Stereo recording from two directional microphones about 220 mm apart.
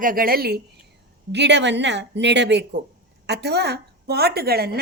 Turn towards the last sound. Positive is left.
turn(degrees=-45)  # may be behind; listen again after turning